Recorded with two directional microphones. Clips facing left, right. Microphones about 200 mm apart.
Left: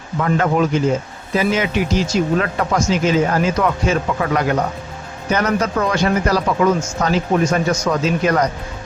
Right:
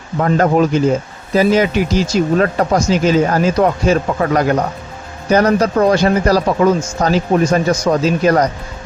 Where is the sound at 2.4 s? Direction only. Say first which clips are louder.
Right 5 dB; 35° right (ahead or behind).